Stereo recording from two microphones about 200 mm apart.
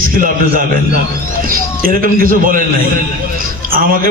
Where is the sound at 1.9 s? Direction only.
45° right (ahead or behind).